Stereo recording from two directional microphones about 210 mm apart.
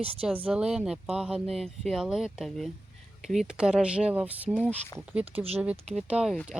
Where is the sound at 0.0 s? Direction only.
25° right (ahead or behind).